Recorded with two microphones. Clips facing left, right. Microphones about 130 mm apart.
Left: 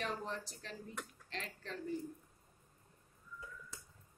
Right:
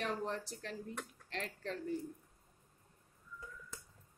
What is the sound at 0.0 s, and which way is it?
Speech, 55° right (ahead or behind).